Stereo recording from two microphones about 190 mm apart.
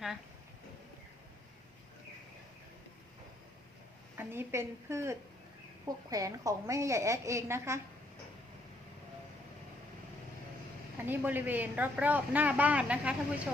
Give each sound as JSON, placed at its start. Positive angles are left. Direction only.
{"t": 4.2, "sound": "speech", "side_deg": -10}
{"t": 11.0, "sound": "speech", "side_deg": -10}